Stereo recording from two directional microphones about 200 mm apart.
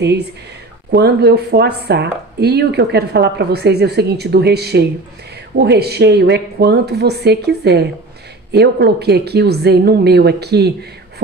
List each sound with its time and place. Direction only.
0.9 s speech: 55° right (ahead or behind)